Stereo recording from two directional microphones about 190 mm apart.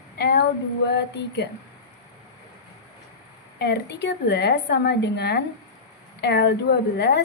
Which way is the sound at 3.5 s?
60° left (ahead or behind).